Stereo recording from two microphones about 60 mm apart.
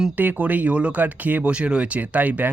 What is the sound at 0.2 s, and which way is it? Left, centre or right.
Speech, right.